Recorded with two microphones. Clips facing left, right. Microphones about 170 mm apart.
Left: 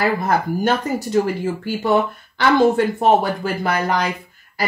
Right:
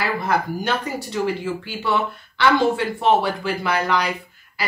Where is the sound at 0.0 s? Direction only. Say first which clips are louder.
Left 3 dB; 45° left (ahead or behind).